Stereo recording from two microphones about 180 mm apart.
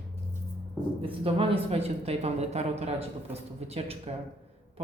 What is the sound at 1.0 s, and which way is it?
A woman's voice, 30° right (ahead or behind).